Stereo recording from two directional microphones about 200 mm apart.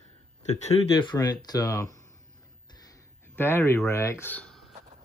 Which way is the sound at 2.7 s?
15° left (ahead or behind).